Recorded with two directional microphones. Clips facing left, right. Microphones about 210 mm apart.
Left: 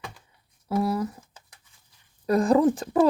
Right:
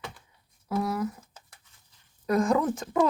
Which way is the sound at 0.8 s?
30° left (ahead or behind).